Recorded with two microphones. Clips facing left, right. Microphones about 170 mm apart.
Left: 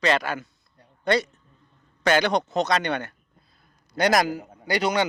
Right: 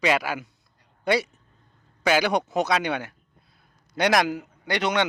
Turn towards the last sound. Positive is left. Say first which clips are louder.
# left 1 dB
turn(degrees=0)  # may be behind; listen again after turning